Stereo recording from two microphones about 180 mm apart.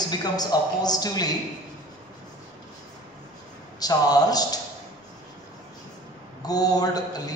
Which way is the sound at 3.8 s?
20° left (ahead or behind).